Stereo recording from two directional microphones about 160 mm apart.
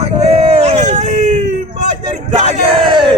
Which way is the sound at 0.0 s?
40° right (ahead or behind).